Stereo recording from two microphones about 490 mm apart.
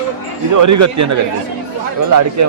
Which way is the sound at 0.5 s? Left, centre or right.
Right.